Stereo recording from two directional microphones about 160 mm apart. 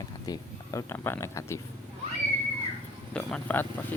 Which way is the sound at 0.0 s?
20° left (ahead or behind).